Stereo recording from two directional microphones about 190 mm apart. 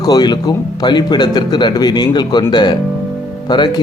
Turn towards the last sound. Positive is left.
turn(degrees=25)  # may be behind; listen again after turning